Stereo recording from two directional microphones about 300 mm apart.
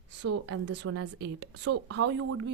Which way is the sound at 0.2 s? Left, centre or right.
Right.